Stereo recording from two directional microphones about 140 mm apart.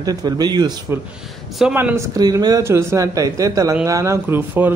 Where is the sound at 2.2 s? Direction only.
30° right (ahead or behind).